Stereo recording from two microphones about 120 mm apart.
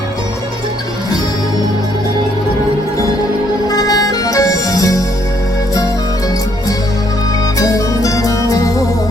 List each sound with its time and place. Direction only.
3.7 s music: 30° left (ahead or behind)
7.6 s music: 30° left (ahead or behind)